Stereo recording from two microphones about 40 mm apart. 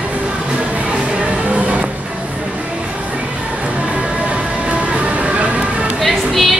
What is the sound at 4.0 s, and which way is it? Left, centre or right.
Music, right.